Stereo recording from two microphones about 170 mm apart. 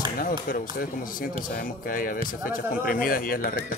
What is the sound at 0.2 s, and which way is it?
Speech, 55° left (ahead or behind).